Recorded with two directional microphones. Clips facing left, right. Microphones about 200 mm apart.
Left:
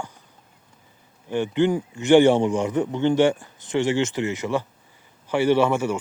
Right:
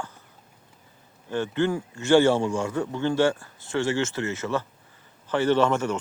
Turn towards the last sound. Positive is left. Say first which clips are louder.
# left 2 dB
turn(degrees=10)  # may be behind; listen again after turning